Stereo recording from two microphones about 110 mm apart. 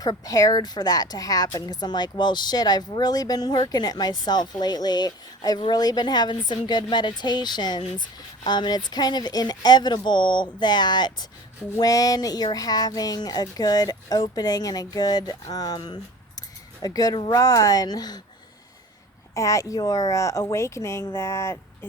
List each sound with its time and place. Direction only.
0.0 s speech: 35° left (ahead or behind)
19.3 s a woman's voice: 30° left (ahead or behind)